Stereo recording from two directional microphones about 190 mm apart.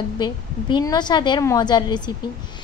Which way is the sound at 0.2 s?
25° left (ahead or behind).